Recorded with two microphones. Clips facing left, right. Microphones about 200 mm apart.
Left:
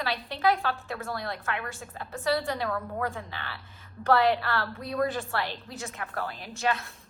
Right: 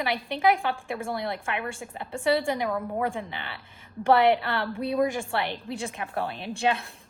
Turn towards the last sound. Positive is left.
turn(degrees=-30)  # may be behind; listen again after turning